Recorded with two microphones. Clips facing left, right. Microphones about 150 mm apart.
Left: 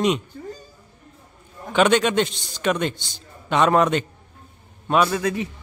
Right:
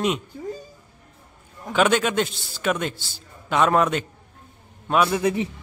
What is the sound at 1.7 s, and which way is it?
A man's voice, 5° right (ahead or behind).